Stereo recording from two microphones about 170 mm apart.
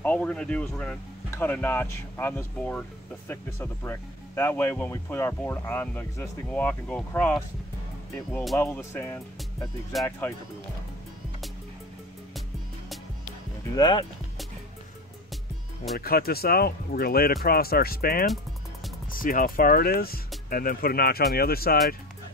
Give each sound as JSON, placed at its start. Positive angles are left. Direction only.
{"t": 0.0, "sound": "speech", "side_deg": 5}
{"t": 9.9, "sound": "speech", "side_deg": 0}
{"t": 13.7, "sound": "speech", "side_deg": 30}
{"t": 16.0, "sound": "speech", "side_deg": 65}